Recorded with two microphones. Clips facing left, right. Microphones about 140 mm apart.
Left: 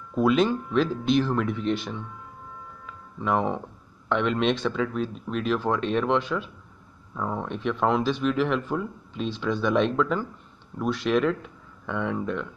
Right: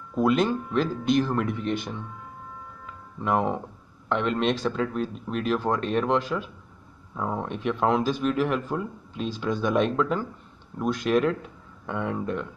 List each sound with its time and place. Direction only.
0.1 s speech: centre (ahead or behind)
3.2 s speech: 5° right (ahead or behind)
5.0 s speech: 50° right (ahead or behind)
5.9 s speech: 5° right (ahead or behind)